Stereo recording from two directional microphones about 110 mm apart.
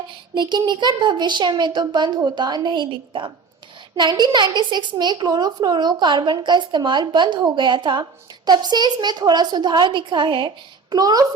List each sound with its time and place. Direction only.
0.3 s a woman's voice: 45° right (ahead or behind)